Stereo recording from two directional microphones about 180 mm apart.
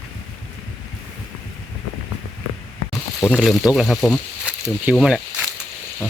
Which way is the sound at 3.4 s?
Centre (ahead or behind).